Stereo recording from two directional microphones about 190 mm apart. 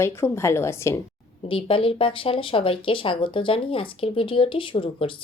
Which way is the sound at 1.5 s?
30° left (ahead or behind).